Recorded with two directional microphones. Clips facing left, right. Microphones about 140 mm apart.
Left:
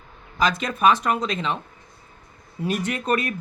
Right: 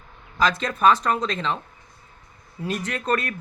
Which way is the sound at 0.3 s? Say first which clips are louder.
Even; 15° left (ahead or behind).